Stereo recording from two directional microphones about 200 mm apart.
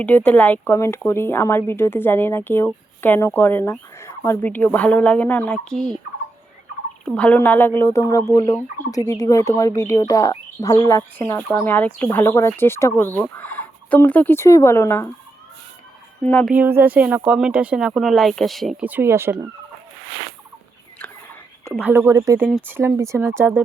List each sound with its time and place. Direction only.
0.0 s speech: 5° left (ahead or behind)
7.0 s speech: 5° left (ahead or behind)
16.2 s speech: 5° left (ahead or behind)
16.6 s speech: 10° right (ahead or behind)
21.0 s whispering: 10° left (ahead or behind)
21.8 s speech: 10° right (ahead or behind)